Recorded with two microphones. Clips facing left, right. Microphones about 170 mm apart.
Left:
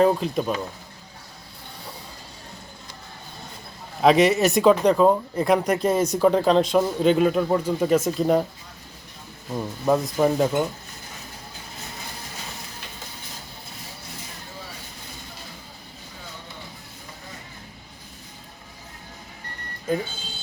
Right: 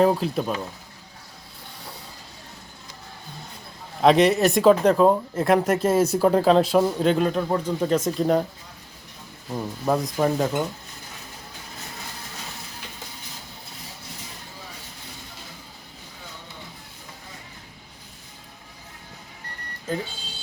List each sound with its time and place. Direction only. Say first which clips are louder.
0.0 s speech: even; centre (ahead or behind)
4.0 s speech: even; centre (ahead or behind)
9.5 s speech: left 2 dB; 5° right (ahead or behind)